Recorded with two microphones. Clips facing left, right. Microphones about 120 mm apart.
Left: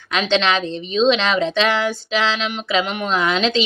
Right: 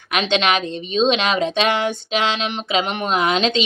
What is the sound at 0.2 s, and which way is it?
A woman's voice, 15° right (ahead or behind).